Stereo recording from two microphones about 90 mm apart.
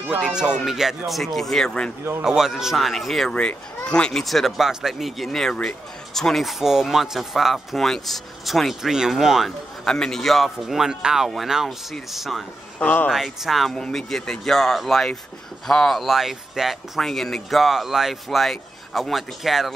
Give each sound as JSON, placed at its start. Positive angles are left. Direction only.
{"t": 0.1, "sound": "speech", "side_deg": -10}
{"t": 2.2, "sound": "speech", "side_deg": -5}
{"t": 9.8, "sound": "speech", "side_deg": 10}
{"t": 12.7, "sound": "speech", "side_deg": 20}
{"t": 13.1, "sound": "speech", "side_deg": -5}